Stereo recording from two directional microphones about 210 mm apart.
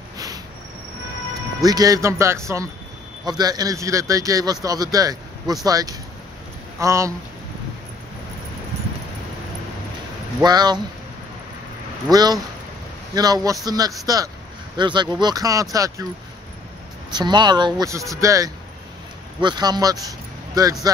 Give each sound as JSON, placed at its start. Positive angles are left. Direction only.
{"t": 1.6, "sound": "speech", "side_deg": -15}
{"t": 10.4, "sound": "speech", "side_deg": -20}
{"t": 12.1, "sound": "speech", "side_deg": -20}
{"t": 17.1, "sound": "speech", "side_deg": -20}